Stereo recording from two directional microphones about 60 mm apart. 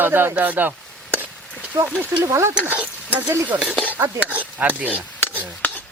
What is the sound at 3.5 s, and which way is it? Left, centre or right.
Speech, right.